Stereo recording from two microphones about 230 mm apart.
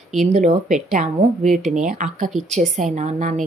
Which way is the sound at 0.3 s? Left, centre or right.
Right.